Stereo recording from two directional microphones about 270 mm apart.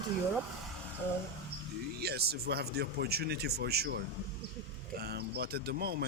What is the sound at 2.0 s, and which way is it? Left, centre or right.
Speech, right.